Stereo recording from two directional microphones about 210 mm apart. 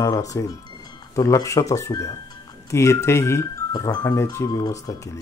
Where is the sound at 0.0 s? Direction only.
15° left (ahead or behind).